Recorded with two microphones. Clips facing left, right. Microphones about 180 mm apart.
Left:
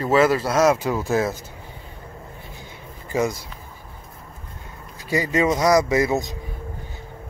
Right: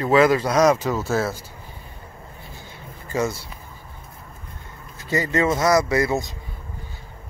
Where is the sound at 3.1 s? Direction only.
15° left (ahead or behind).